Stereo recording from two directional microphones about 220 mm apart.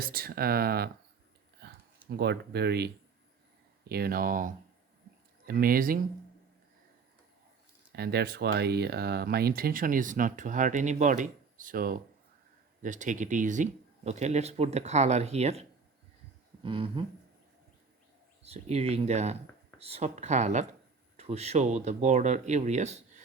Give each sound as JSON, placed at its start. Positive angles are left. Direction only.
{"t": 0.0, "sound": "speech", "side_deg": -45}
{"t": 2.0, "sound": "speech", "side_deg": -50}
{"t": 7.9, "sound": "speech", "side_deg": -45}
{"t": 16.6, "sound": "speech", "side_deg": -25}
{"t": 18.4, "sound": "speech", "side_deg": -30}